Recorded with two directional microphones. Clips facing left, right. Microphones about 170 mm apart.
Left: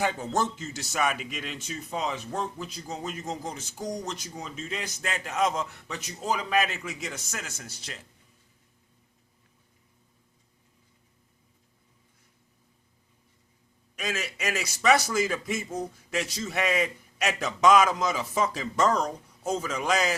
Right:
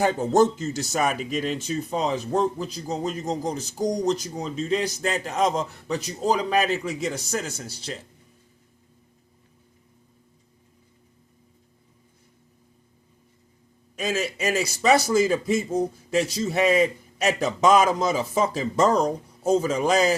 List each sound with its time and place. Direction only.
0.0 s speech: 40° right (ahead or behind)
13.9 s speech: 30° right (ahead or behind)